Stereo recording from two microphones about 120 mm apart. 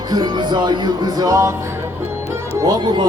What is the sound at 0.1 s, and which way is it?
Music, 35° right (ahead or behind).